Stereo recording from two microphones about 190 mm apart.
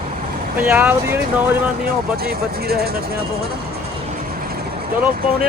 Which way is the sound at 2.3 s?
55° right (ahead or behind).